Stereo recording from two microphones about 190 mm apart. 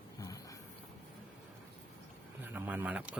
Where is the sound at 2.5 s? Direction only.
10° right (ahead or behind).